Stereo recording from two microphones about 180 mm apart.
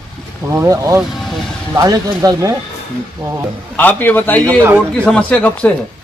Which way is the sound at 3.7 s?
10° left (ahead or behind).